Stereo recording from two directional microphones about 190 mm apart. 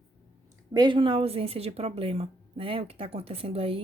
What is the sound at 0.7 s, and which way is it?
A woman's voice, 25° right (ahead or behind).